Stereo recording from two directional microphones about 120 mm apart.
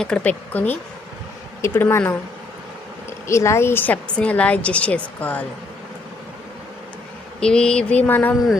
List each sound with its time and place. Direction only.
0.0 s a woman's voice: 10° left (ahead or behind)
3.2 s a woman's voice: 25° left (ahead or behind)
7.3 s a woman's voice: 5° left (ahead or behind)